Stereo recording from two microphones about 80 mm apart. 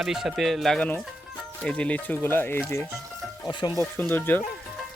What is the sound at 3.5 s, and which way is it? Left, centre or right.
Speech, left.